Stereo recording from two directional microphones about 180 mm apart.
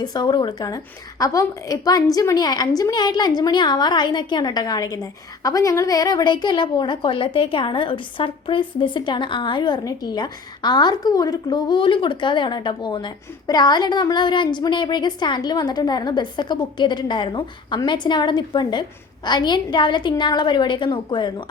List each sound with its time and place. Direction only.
0.0 s a woman's voice: 20° left (ahead or behind)